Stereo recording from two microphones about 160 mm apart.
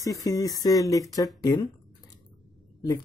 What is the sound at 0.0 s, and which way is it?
Speech, 20° left (ahead or behind).